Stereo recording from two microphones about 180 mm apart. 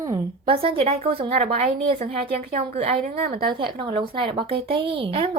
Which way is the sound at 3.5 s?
25° right (ahead or behind).